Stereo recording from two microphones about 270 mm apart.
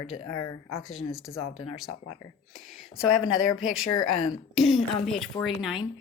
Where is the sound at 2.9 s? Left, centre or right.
Centre.